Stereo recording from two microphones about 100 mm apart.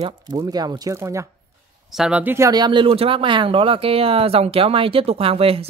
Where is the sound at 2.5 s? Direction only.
50° right (ahead or behind).